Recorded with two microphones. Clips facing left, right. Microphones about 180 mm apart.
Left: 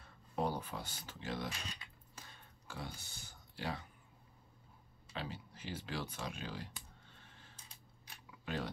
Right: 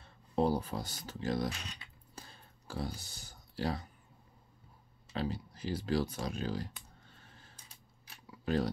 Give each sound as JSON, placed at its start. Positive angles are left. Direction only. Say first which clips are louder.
{"t": 0.0, "sound": "speech", "louder": "right 7 dB", "side_deg": -30}
{"t": 2.1, "sound": "clicking", "louder": "right 5 dB", "side_deg": -35}
{"t": 5.1, "sound": "speech", "louder": "right 8 dB", "side_deg": -40}
{"t": 7.2, "sound": "mechanisms", "louder": "right 2 dB", "side_deg": -40}
{"t": 8.3, "sound": "camera", "louder": "right 9 dB", "side_deg": -40}